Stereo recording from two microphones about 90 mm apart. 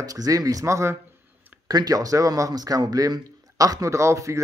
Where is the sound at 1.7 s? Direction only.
45° right (ahead or behind).